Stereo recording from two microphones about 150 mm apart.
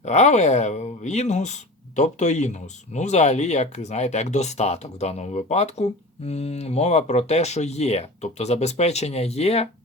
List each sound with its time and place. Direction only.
0.0 s speech: 50° left (ahead or behind)